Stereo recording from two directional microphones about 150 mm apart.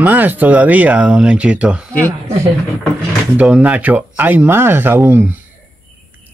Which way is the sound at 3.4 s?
10° right (ahead or behind).